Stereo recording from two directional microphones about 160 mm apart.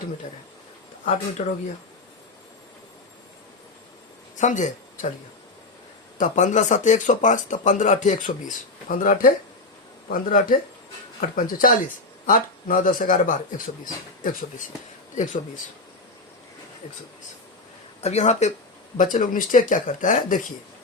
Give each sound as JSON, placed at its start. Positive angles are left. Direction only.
{"t": 1.0, "sound": "speech", "side_deg": 40}
{"t": 4.4, "sound": "speech", "side_deg": 50}
{"t": 6.1, "sound": "speech", "side_deg": 50}
{"t": 15.1, "sound": "speech", "side_deg": 50}
{"t": 18.0, "sound": "speech", "side_deg": 45}